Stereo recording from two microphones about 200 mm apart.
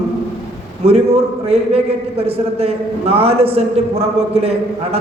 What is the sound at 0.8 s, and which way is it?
A man's voice, 30° right (ahead or behind).